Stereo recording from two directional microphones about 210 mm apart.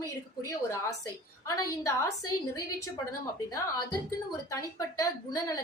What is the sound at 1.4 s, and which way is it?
Speech, 15° left (ahead or behind).